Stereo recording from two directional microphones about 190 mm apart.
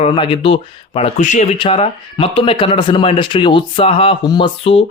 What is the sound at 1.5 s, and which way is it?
Speech, 30° left (ahead or behind).